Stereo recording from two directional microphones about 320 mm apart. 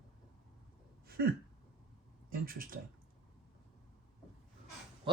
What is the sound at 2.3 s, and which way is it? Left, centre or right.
Speech, right.